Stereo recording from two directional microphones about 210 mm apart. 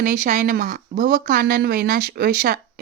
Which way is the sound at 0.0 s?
40° right (ahead or behind).